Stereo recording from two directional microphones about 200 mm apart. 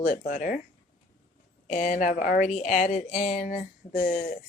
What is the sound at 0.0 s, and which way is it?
Speech, 40° left (ahead or behind).